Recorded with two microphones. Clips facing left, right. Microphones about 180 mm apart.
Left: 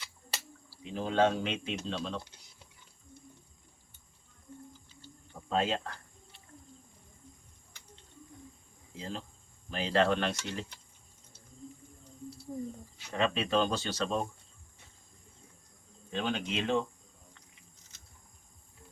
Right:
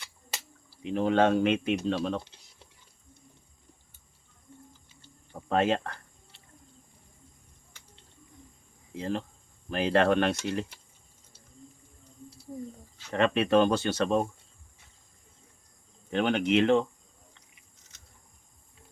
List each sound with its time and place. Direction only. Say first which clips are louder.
0.9 s speech: right 4 dB; 65° right (ahead or behind)
5.5 s speech: right 5 dB; 60° right (ahead or behind)
9.0 s speech: right 8 dB; 60° right (ahead or behind)
13.1 s speech: right 6 dB; 60° right (ahead or behind)
16.0 s speech: right 8 dB; 70° right (ahead or behind)